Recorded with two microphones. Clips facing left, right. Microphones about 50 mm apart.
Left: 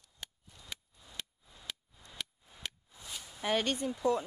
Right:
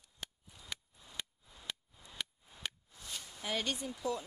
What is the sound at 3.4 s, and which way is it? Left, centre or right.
Speech, left.